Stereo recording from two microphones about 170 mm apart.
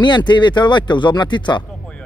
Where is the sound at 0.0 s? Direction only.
25° left (ahead or behind).